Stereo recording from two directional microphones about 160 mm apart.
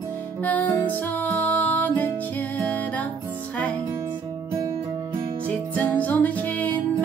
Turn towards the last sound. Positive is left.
turn(degrees=10)  # may be behind; listen again after turning